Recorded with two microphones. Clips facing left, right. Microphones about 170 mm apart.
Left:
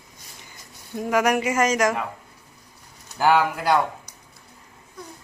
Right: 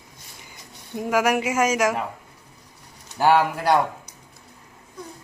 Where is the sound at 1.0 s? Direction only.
5° right (ahead or behind).